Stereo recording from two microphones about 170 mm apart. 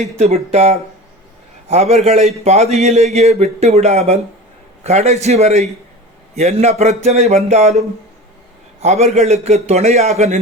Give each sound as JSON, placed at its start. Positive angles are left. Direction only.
{"t": 0.2, "sound": "a man's voice", "side_deg": -40}